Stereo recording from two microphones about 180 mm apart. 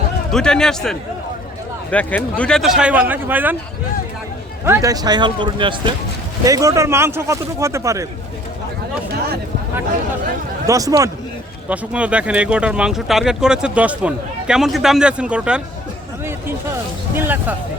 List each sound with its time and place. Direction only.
0.3 s speech: 5° left (ahead or behind)
4.6 s speech: 15° right (ahead or behind)
10.7 s speech: 20° right (ahead or behind)
11.7 s speech: 5° right (ahead or behind)
17.2 s speech: 10° right (ahead or behind)